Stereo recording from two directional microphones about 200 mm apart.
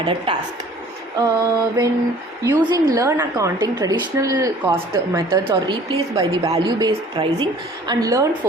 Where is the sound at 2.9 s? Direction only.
15° right (ahead or behind).